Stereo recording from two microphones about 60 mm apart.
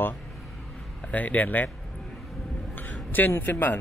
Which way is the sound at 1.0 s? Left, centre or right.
Left.